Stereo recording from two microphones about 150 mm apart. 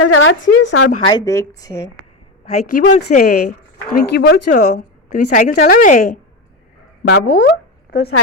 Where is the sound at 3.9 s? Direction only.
65° left (ahead or behind).